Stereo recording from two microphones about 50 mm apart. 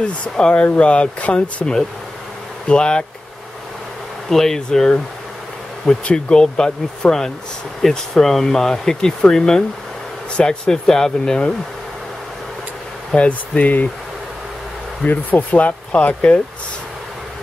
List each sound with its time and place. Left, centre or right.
0.0 s speech: left
2.7 s speech: centre
4.3 s speech: centre
6.0 s speech: centre
13.1 s speech: left
15.0 s speech: left